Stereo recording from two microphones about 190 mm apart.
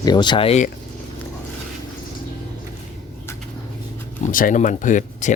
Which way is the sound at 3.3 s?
15° left (ahead or behind).